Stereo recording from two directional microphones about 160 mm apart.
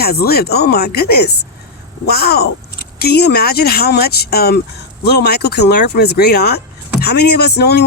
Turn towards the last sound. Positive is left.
turn(degrees=90)